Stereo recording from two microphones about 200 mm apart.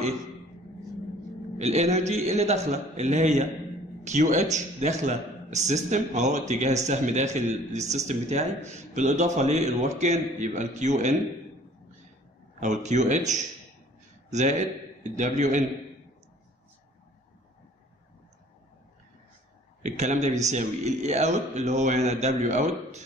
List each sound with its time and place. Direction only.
1.6 s a man's voice: 35° right (ahead or behind)
12.5 s a man's voice: 35° right (ahead or behind)
19.8 s a man's voice: 35° right (ahead or behind)